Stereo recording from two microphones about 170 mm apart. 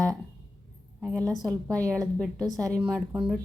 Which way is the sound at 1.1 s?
20° right (ahead or behind).